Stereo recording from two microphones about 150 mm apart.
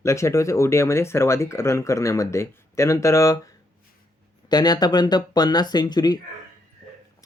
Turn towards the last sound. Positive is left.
turn(degrees=25)  # may be behind; listen again after turning